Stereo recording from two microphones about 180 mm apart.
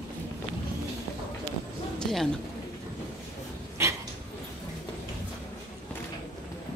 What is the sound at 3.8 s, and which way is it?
Dog, 15° right (ahead or behind).